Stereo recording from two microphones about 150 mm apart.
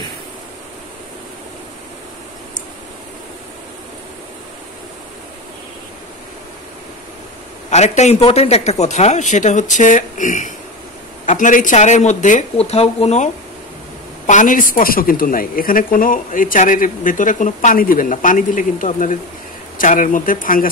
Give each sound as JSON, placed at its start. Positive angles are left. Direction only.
{"t": 7.7, "sound": "speech", "side_deg": 50}
{"t": 14.2, "sound": "a woman's voice", "side_deg": 60}